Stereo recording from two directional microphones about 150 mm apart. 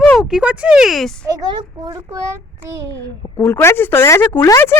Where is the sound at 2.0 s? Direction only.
20° right (ahead or behind).